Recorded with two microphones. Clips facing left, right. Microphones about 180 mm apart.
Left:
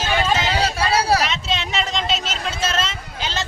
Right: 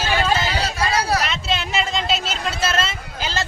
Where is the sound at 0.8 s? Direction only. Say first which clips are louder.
Left 1 dB; 30° left (ahead or behind).